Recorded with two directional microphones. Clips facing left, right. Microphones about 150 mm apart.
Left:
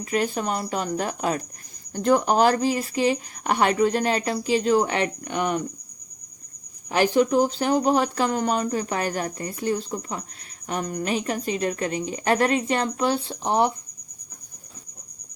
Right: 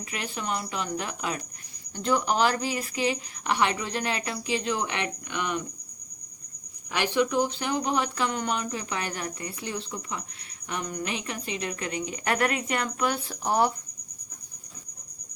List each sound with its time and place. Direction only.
0.0 s speech: 40° left (ahead or behind)
6.9 s speech: 40° left (ahead or behind); by 13.7 s 20° left (ahead or behind)